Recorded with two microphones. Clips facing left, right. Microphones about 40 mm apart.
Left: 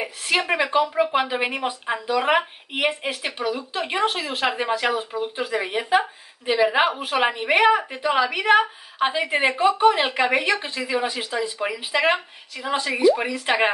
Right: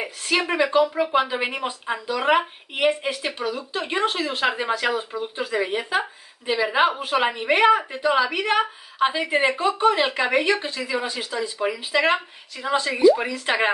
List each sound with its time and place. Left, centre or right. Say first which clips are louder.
0.4 s a woman's voice: right 2 dB; centre